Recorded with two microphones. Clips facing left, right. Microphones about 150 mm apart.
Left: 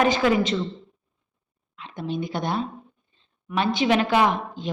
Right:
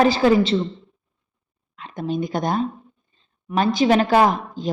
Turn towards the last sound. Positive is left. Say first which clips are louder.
# right 4 dB
turn(degrees=-40)  # may be behind; listen again after turning